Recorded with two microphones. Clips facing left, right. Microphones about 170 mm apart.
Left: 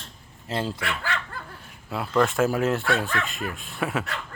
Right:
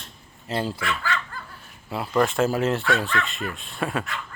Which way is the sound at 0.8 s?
65° left (ahead or behind).